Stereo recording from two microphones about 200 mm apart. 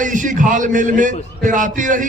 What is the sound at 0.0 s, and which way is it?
A man's voice, 40° right (ahead or behind).